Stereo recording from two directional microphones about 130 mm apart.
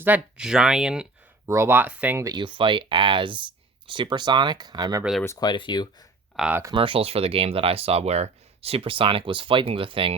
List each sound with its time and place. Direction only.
0.0 s speech: 10° right (ahead or behind)
1.5 s speech: 20° right (ahead or behind)
2.2 s speech: 35° right (ahead or behind)
5.4 s speech: 35° left (ahead or behind)
6.7 s speech: 40° right (ahead or behind)